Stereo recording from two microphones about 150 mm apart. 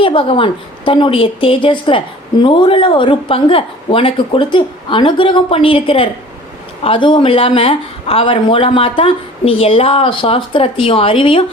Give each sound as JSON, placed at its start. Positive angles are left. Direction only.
{"t": 0.0, "sound": "a woman's voice", "side_deg": 35}